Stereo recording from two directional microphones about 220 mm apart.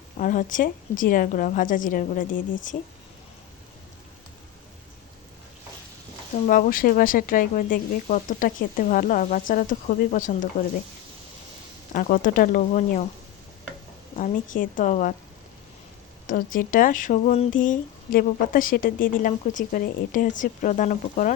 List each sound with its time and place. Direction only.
0.2 s speech: 35° left (ahead or behind)
6.5 s speech: 40° left (ahead or behind)
11.9 s speech: 40° left (ahead or behind)
14.2 s speech: 35° left (ahead or behind)
16.2 s speech: 40° left (ahead or behind)